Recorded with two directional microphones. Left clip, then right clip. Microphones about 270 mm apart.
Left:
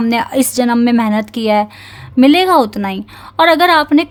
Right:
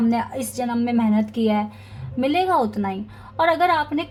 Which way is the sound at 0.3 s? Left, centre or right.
Left.